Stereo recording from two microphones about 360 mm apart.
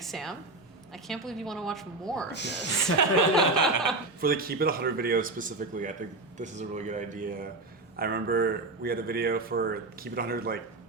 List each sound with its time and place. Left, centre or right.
0.0 s a woman's voice: centre
2.3 s speech: left
3.3 s a woman's voice: centre
4.2 s a man's voice: right